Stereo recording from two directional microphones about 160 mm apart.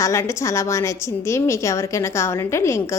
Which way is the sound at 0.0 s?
20° left (ahead or behind).